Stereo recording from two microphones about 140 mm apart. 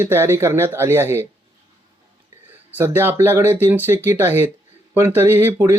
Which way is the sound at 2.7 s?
15° right (ahead or behind).